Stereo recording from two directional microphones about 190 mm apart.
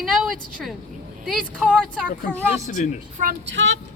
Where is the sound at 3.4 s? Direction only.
70° right (ahead or behind).